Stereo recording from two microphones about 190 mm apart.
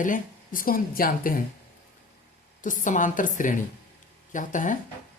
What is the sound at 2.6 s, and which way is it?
Speech, 45° left (ahead or behind).